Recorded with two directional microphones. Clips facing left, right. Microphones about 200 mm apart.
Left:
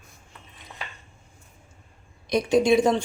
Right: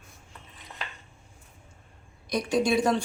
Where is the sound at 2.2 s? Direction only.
25° left (ahead or behind).